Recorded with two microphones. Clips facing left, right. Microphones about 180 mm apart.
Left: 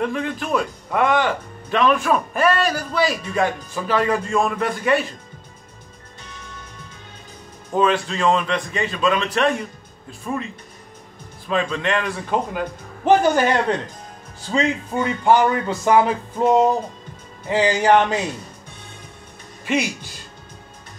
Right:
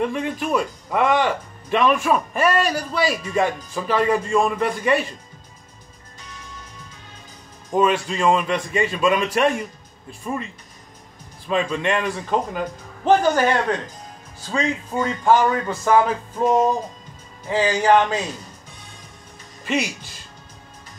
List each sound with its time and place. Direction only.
0.0 s speech: centre (ahead or behind)
7.7 s a man's voice: 5° right (ahead or behind)
13.2 s speech: 15° left (ahead or behind)
15.6 s speech: 15° left (ahead or behind)
19.6 s speech: centre (ahead or behind)